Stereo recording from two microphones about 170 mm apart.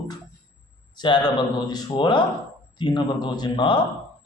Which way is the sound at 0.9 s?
30° left (ahead or behind).